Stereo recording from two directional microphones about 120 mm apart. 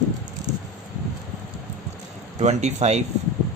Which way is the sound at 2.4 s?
65° right (ahead or behind).